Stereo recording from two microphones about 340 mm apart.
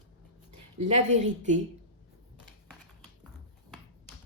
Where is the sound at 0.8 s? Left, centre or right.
Centre.